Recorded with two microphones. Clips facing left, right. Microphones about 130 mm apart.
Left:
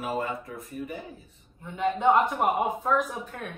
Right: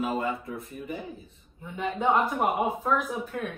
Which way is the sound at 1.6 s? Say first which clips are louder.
Left 3 dB; 5° right (ahead or behind).